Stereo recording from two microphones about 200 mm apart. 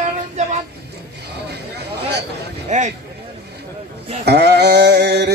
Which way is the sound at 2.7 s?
35° right (ahead or behind).